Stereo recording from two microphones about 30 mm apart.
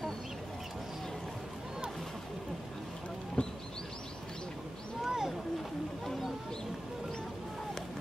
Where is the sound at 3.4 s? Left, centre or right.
Left.